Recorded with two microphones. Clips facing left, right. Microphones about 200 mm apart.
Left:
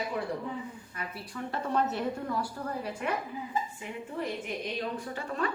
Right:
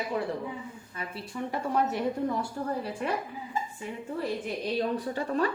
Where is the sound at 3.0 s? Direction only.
35° right (ahead or behind).